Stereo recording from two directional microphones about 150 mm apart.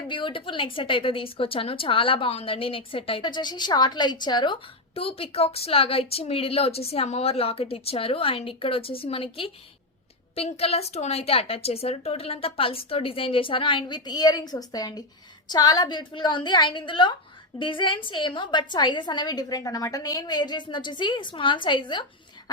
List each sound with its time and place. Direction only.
0.1 s a woman's voice: 35° left (ahead or behind)